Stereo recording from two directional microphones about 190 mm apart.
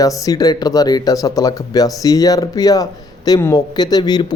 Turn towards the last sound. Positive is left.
turn(degrees=20)  # may be behind; listen again after turning